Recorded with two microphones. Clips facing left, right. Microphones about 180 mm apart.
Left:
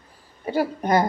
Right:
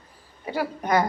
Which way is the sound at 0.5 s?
30° left (ahead or behind).